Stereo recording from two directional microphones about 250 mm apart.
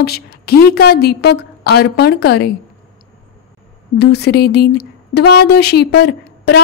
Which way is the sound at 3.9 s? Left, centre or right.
Left.